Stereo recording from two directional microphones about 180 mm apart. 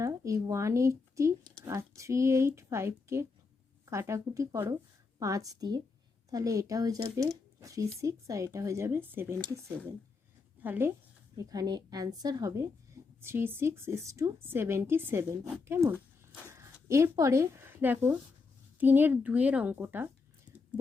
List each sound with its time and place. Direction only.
0.0 s a woman's voice: 15° right (ahead or behind)